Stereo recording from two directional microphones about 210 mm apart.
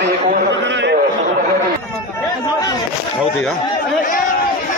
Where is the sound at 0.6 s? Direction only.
55° right (ahead or behind).